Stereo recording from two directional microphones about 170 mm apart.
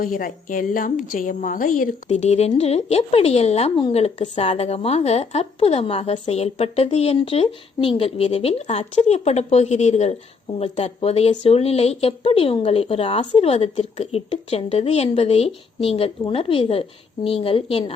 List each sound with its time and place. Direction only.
0.0 s a woman's voice: 55° left (ahead or behind); by 17.9 s 30° left (ahead or behind)